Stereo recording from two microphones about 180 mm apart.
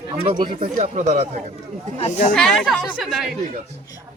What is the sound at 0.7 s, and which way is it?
Speech, 40° right (ahead or behind).